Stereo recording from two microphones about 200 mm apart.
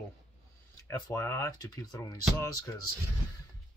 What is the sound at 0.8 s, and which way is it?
Speech, 15° left (ahead or behind).